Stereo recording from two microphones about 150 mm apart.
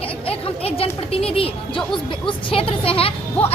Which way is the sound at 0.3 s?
40° left (ahead or behind).